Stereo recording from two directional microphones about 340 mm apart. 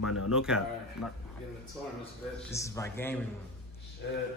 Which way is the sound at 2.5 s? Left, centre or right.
Centre.